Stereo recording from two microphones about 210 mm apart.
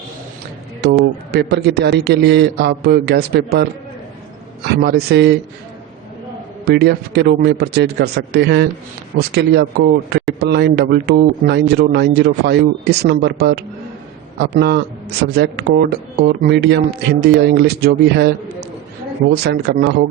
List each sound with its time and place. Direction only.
0.8 s speech: 50° right (ahead or behind)
6.7 s speech: 50° right (ahead or behind)
19.7 s speech: 55° right (ahead or behind)